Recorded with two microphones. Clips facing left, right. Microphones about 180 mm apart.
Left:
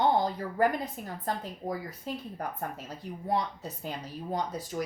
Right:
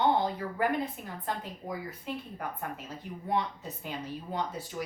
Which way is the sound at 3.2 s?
35° left (ahead or behind).